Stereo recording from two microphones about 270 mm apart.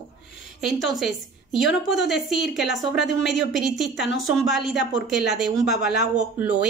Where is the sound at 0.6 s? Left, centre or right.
Centre.